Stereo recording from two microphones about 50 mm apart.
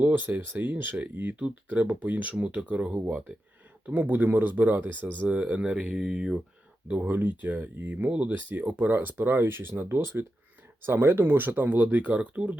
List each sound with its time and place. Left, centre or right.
0.1 s speech: right
2.6 s speech: centre; by 5.0 s right
5.3 s speech: right; by 6.3 s centre
7.0 s speech: right